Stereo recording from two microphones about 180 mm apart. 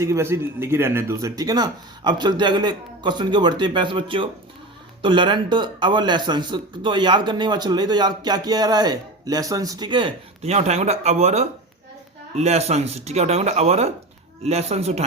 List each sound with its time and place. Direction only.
0.0 s speech: 15° right (ahead or behind); by 15.0 s 35° right (ahead or behind)